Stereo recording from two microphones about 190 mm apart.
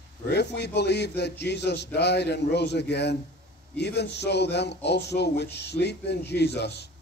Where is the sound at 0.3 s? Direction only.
60° left (ahead or behind).